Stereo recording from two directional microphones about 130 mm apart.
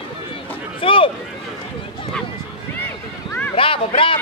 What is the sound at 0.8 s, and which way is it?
Speech, 45° left (ahead or behind).